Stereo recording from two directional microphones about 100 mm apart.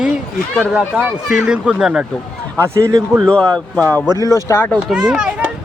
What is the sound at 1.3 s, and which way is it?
Speech, 10° right (ahead or behind).